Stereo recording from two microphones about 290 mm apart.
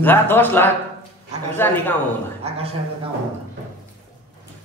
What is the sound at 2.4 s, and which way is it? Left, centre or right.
Speech, right.